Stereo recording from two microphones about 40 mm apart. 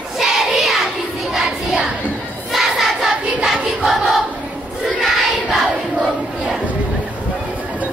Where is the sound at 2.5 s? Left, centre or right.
Centre.